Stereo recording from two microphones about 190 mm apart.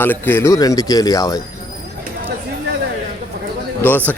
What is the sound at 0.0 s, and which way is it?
Speech, 10° left (ahead or behind).